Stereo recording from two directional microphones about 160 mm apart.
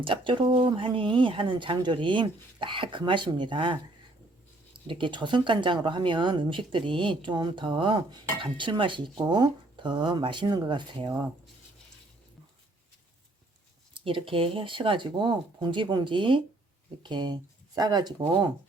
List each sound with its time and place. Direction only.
0.0 s speech: 30° right (ahead or behind)
14.0 s speech: 35° right (ahead or behind)